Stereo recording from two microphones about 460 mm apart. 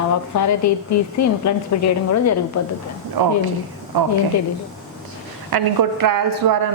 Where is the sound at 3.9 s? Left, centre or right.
Right.